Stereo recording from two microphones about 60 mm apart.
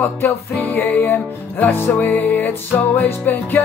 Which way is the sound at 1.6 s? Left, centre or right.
Left.